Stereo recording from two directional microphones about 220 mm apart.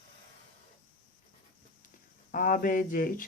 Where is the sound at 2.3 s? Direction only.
40° left (ahead or behind).